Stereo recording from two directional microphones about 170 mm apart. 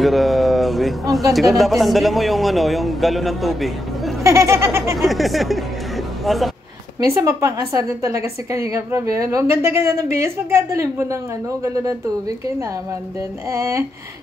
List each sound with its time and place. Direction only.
0.0 s speech: centre (ahead or behind)
4.2 s a woman's voice: 20° right (ahead or behind)
4.9 s speech: centre (ahead or behind)
7.1 s a woman's voice: 15° right (ahead or behind)
13.5 s a woman's voice: 15° right (ahead or behind)